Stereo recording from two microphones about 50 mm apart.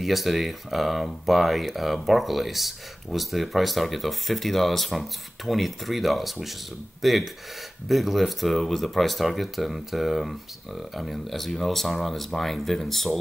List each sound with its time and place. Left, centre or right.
0.0 s speech: centre